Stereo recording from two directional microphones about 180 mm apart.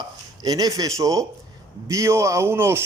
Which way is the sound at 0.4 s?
20° right (ahead or behind).